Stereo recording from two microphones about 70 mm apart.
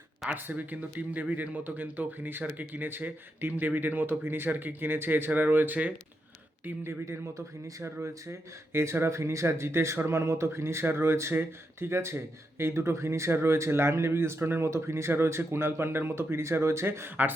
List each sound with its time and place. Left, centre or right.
0.3 s speech: right
6.8 s speech: right